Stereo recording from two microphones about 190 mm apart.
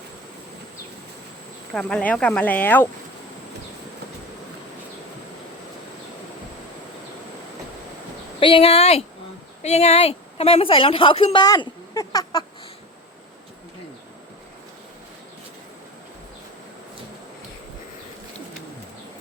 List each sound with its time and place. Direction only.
1.7 s speech: 5° left (ahead or behind)
8.4 s a woman's voice: 25° left (ahead or behind)